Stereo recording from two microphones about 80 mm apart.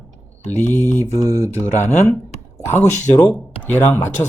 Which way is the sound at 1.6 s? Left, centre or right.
Left.